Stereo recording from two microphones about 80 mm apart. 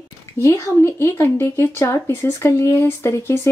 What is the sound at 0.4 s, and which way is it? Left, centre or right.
Speech, left.